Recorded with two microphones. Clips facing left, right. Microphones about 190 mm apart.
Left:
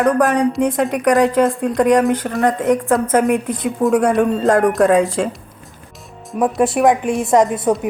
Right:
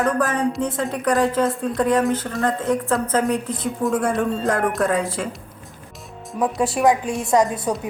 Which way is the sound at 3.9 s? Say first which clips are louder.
Left 7 dB; 70° left (ahead or behind).